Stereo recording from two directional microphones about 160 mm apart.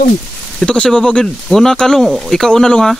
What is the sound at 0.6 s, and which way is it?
Speech, 5° left (ahead or behind).